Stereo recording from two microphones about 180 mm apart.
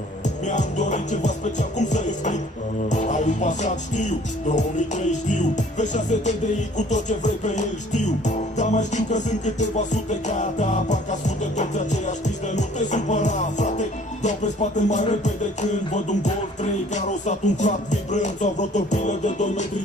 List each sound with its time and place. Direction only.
0.5 s music: 40° left (ahead or behind)